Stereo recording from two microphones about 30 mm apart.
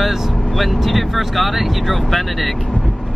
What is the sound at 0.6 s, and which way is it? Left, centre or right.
Speech, centre.